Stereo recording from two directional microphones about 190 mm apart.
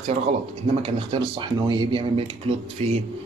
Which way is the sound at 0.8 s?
25° right (ahead or behind).